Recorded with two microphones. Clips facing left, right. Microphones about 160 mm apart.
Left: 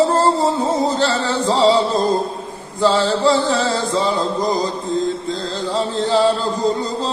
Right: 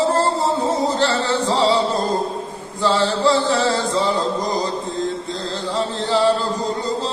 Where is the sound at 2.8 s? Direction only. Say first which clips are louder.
Left 2 dB; 15° left (ahead or behind).